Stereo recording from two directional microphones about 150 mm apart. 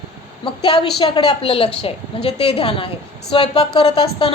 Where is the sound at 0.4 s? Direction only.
35° left (ahead or behind).